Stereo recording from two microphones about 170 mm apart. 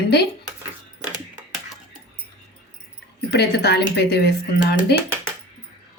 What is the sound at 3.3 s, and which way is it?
Speech, 75° left (ahead or behind).